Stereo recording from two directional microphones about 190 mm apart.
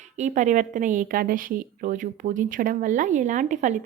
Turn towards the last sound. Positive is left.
turn(degrees=-40)  # may be behind; listen again after turning